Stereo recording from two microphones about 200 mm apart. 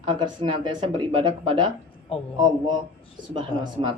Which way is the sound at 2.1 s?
30° left (ahead or behind).